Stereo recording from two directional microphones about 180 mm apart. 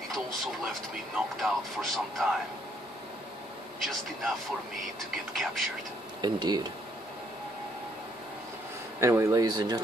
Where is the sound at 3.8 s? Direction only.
Centre (ahead or behind).